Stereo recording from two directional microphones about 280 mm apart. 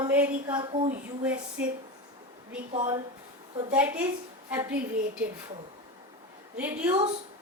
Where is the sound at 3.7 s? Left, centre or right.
Centre.